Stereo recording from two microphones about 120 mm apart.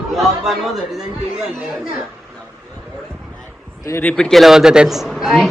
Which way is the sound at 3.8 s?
20° left (ahead or behind).